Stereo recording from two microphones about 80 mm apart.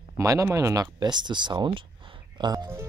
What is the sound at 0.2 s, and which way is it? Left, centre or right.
Speech, right.